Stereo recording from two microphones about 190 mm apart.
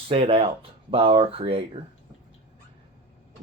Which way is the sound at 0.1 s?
30° right (ahead or behind).